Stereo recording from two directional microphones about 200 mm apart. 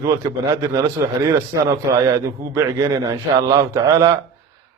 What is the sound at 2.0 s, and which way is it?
A man's voice, 20° right (ahead or behind).